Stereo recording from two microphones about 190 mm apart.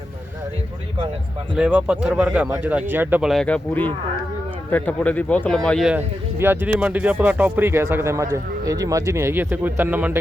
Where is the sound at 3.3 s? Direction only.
5° left (ahead or behind).